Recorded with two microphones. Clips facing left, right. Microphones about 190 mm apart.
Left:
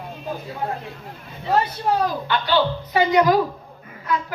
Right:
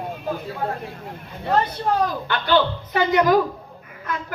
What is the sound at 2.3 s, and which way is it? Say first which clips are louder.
A man's voice: right 1 dB; 50° right (ahead or behind).